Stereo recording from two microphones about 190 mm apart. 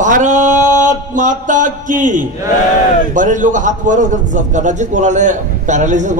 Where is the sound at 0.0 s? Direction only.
40° right (ahead or behind).